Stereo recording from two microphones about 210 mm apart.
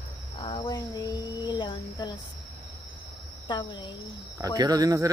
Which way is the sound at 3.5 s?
20° left (ahead or behind).